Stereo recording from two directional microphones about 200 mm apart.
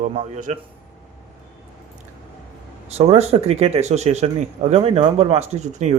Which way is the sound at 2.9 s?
30° right (ahead or behind).